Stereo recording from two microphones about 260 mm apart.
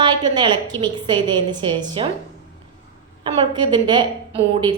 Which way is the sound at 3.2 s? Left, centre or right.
Centre.